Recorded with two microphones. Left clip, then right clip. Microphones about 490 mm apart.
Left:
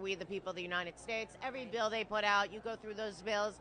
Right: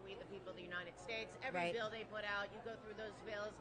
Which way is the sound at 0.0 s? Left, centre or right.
Left.